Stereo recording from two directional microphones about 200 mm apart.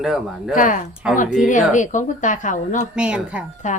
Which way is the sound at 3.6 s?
40° left (ahead or behind).